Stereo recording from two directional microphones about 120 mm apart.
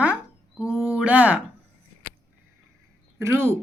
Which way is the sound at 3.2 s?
20° right (ahead or behind).